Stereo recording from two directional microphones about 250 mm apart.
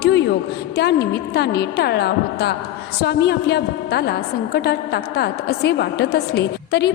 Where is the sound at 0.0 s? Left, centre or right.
Left.